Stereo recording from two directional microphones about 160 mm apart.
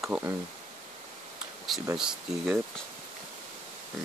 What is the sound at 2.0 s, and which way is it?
Speech, 5° right (ahead or behind).